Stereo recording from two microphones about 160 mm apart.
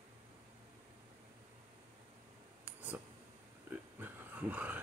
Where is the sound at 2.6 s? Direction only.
10° right (ahead or behind).